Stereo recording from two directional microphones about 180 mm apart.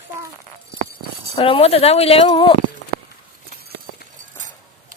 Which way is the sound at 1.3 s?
30° left (ahead or behind).